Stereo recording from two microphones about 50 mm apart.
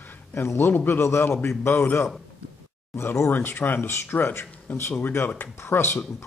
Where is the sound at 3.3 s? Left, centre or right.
Left.